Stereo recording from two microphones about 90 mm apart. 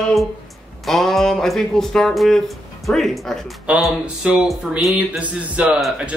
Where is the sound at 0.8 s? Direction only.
Centre (ahead or behind).